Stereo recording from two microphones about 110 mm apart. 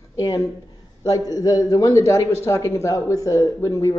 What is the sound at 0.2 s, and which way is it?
A woman's voice, 30° left (ahead or behind).